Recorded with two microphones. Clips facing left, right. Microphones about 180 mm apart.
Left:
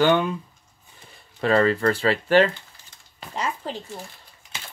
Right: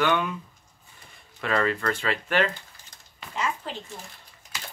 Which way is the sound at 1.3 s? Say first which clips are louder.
Left 6 dB; 35° left (ahead or behind).